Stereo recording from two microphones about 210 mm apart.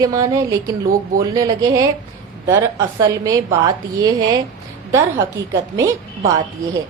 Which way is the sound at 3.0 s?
15° right (ahead or behind).